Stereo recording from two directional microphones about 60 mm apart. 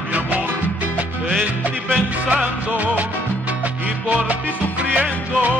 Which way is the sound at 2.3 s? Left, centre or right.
Right.